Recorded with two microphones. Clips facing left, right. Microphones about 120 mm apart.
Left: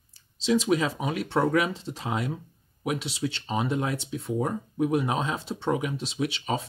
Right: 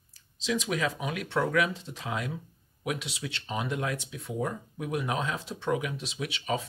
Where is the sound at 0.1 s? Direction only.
30° left (ahead or behind).